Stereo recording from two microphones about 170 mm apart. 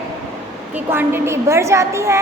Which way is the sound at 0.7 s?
10° right (ahead or behind).